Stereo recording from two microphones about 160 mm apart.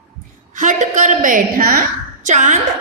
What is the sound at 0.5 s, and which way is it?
A woman's voice, 50° right (ahead or behind).